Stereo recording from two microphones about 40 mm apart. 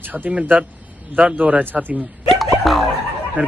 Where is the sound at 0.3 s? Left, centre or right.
Right.